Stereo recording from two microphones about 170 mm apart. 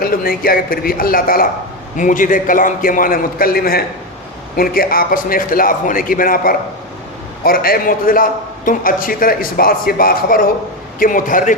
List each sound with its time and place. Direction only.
0.0 s a man's voice: 60° left (ahead or behind)